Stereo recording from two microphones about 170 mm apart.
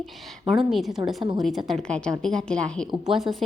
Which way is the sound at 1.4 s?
Centre (ahead or behind).